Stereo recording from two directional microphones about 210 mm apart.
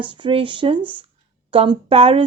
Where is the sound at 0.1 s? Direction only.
25° right (ahead or behind).